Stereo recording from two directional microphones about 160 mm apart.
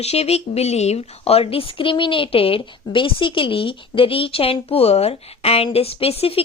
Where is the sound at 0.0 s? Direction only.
40° left (ahead or behind).